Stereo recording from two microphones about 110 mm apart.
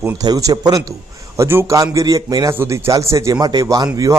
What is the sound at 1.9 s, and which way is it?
Speech, 35° right (ahead or behind).